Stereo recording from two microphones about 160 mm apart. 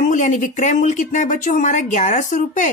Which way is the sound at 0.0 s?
50° left (ahead or behind).